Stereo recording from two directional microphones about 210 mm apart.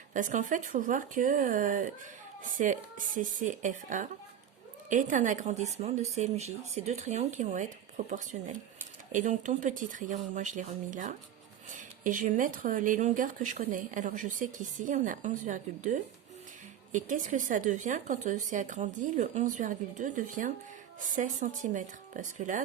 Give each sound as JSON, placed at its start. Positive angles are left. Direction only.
{"t": 0.1, "sound": "speech", "side_deg": -35}